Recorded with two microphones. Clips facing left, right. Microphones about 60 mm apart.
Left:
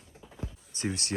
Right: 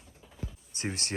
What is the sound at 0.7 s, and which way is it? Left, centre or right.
Speech, right.